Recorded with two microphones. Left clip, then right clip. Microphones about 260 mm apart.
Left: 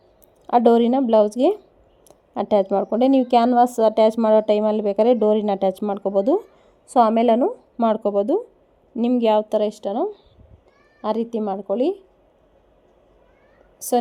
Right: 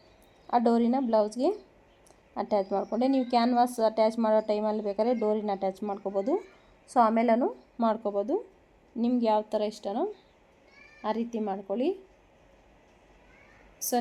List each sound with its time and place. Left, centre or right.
0.4 s speech: left